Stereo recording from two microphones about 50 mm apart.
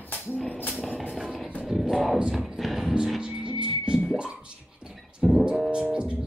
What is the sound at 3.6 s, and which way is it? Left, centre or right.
Music, centre.